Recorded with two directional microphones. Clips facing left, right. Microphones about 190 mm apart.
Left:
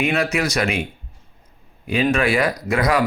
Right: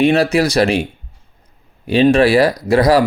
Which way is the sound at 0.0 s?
35° right (ahead or behind).